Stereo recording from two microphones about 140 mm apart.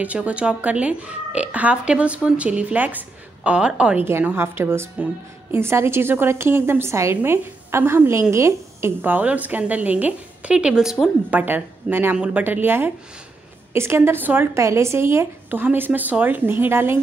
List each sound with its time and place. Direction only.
0.0 s speech: 10° right (ahead or behind)